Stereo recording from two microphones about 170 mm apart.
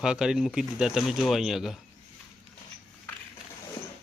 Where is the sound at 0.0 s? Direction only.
5° right (ahead or behind).